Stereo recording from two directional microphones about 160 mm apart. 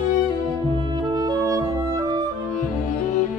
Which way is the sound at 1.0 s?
25° right (ahead or behind).